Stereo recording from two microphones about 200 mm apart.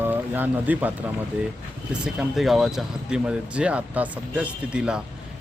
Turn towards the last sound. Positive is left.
turn(degrees=-5)  # may be behind; listen again after turning